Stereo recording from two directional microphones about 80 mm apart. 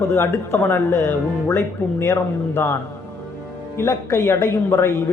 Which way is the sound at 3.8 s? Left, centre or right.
Left.